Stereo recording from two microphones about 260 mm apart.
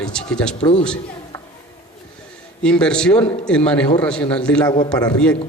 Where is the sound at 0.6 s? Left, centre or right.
Left.